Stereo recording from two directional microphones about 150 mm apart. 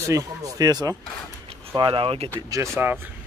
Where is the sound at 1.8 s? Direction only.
35° right (ahead or behind).